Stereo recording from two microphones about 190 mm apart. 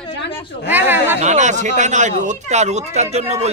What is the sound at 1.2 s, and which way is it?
Speech, 40° right (ahead or behind).